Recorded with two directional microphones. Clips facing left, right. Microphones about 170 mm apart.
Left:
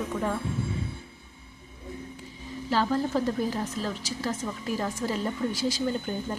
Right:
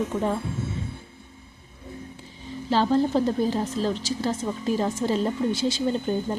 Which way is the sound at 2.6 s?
30° right (ahead or behind).